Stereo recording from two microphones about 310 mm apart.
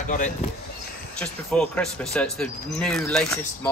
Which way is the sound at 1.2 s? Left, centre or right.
Centre.